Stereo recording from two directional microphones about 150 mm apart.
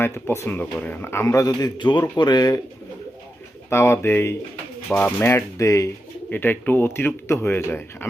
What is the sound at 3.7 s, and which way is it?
Speech, 15° left (ahead or behind).